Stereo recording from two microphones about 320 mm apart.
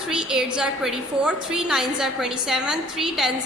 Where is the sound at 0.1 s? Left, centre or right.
Centre.